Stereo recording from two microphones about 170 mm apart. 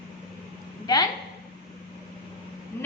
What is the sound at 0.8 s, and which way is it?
Speech, 25° left (ahead or behind).